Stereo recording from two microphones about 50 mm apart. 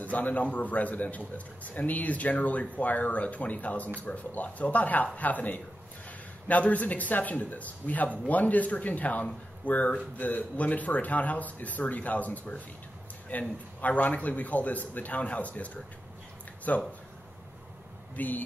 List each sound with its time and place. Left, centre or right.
0.0 s a man's voice: left
18.1 s speech: left